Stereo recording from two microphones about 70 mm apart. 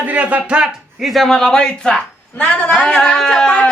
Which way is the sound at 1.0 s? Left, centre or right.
Centre.